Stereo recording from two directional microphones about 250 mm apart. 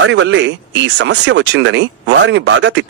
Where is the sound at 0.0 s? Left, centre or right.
Right.